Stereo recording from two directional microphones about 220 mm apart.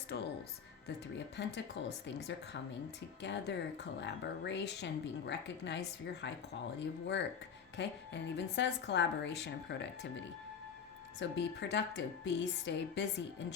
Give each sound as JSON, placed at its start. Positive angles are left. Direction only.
{"t": 0.1, "sound": "speech", "side_deg": 50}
{"t": 1.4, "sound": "speech", "side_deg": 50}
{"t": 11.2, "sound": "speech", "side_deg": 55}